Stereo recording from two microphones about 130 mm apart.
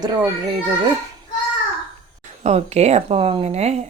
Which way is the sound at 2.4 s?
55° right (ahead or behind).